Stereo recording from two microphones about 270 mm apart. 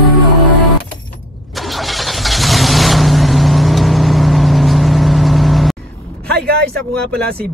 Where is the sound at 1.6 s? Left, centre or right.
Centre.